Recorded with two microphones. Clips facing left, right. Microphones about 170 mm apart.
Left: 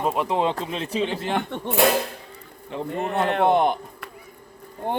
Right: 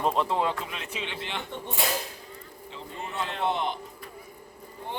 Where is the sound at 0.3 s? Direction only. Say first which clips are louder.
Left 4 dB; 20° left (ahead or behind).